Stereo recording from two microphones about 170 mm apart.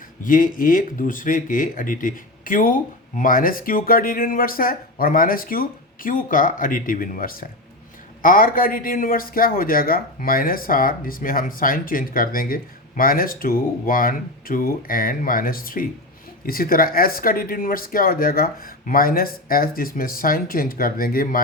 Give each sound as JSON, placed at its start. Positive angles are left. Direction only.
{"t": 0.3, "sound": "speech", "side_deg": 55}